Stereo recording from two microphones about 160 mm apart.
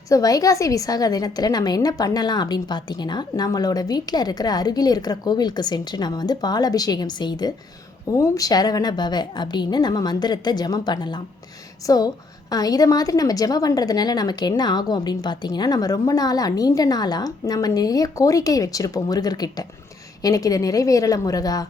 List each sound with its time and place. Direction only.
0.1 s a woman's voice: 20° left (ahead or behind)